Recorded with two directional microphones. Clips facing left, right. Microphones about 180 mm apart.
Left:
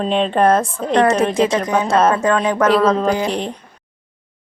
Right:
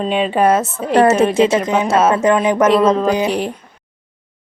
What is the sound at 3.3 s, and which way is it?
Speech, 5° right (ahead or behind).